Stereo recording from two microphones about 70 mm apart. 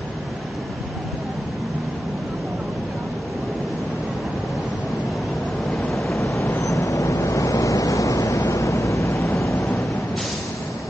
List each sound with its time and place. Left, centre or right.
5.7 s waves: centre
6.2 s vehicle: left